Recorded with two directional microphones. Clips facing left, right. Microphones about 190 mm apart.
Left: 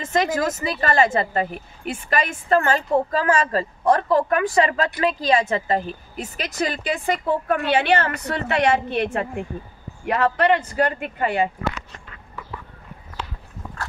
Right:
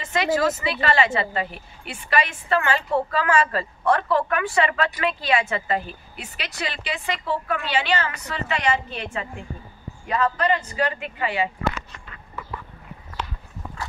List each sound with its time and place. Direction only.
0.0 s a woman's voice: 45° left (ahead or behind)